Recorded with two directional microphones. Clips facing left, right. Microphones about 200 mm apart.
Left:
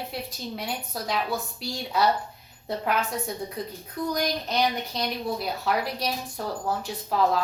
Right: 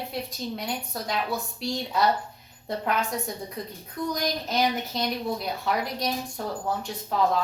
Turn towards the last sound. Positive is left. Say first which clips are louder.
# left 1 dB
turn(degrees=5)  # may be behind; listen again after turning